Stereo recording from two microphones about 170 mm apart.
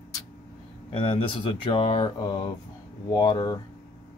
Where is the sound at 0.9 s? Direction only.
35° left (ahead or behind).